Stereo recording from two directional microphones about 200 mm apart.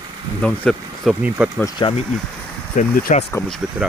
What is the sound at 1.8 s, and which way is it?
Speech, 25° left (ahead or behind).